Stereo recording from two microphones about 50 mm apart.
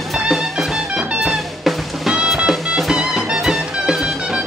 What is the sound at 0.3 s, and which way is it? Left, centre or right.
Music, centre.